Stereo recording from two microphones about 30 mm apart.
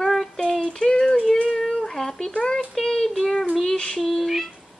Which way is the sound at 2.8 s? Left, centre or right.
Centre.